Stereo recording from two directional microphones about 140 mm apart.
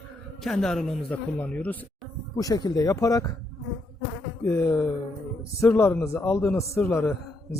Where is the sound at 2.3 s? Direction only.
25° left (ahead or behind).